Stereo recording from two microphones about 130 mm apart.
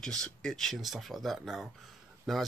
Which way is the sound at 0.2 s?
5° left (ahead or behind).